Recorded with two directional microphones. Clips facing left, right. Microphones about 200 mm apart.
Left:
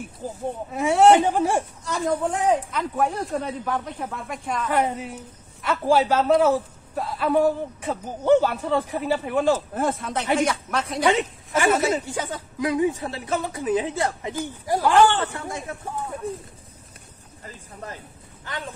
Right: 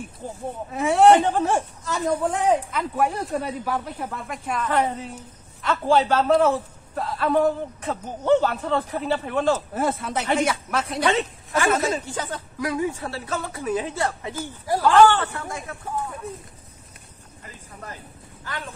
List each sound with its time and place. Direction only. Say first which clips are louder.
0.2 s a woman's voice: left 3 dB; 5° left (ahead or behind)
1.9 s speech: right 1 dB; centre (ahead or behind)
4.6 s a woman's voice: even; 10° left (ahead or behind)
9.8 s speech: even; 5° right (ahead or behind)
11.1 s a woman's voice: left 4 dB; 20° left (ahead or behind)
15.3 s speech: left 1 dB; 25° left (ahead or behind)